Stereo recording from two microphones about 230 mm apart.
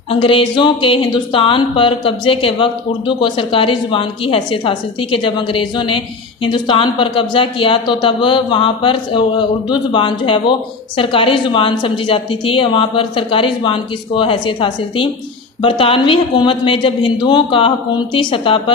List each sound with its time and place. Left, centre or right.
0.1 s a woman's voice: left